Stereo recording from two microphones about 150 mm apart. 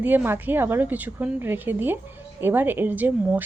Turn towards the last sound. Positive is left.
turn(degrees=-10)  # may be behind; listen again after turning